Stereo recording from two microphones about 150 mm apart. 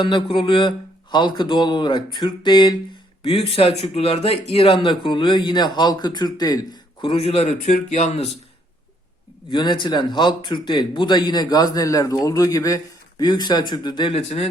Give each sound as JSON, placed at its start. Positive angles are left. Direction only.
{"t": 0.0, "sound": "speech", "side_deg": 35}
{"t": 9.5, "sound": "speech", "side_deg": 30}
{"t": 14.2, "sound": "speech", "side_deg": 45}